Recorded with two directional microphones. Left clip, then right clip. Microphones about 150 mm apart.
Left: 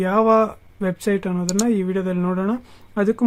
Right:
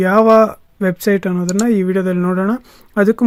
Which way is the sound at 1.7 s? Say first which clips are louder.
Right 9 dB; 30° right (ahead or behind).